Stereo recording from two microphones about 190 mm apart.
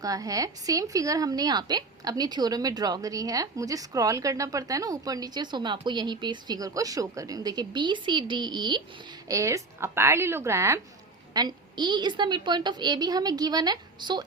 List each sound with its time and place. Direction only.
0.0 s a woman's voice: 20° right (ahead or behind)